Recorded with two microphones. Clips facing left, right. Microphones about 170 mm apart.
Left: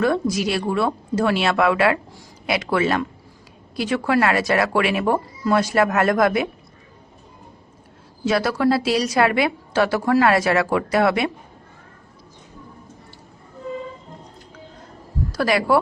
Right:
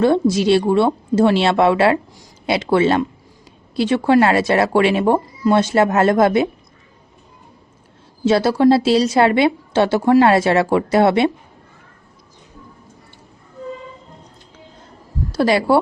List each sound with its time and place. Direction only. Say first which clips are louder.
0.0 s a woman's voice: right 5 dB; 30° right (ahead or behind)
8.2 s a woman's voice: right 6 dB; 25° right (ahead or behind)
15.3 s a woman's voice: right 4 dB; 25° right (ahead or behind)